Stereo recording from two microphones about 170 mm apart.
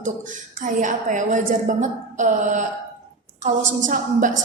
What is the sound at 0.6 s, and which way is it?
A woman's voice, 50° right (ahead or behind).